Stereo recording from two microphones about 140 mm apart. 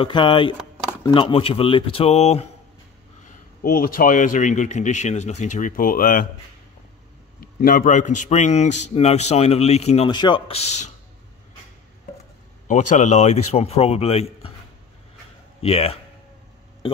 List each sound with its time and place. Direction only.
0.0 s a man's voice: 35° left (ahead or behind)
3.3 s a man's voice: 90° left
7.6 s a man's voice: 70° left (ahead or behind); by 10.0 s 50° left (ahead or behind)
10.0 s speech: 35° left (ahead or behind)
10.5 s a man's voice: 50° left (ahead or behind)
12.6 s a man's voice: 60° left (ahead or behind); by 14.5 s 45° left (ahead or behind)
15.6 s a man's voice: 45° left (ahead or behind)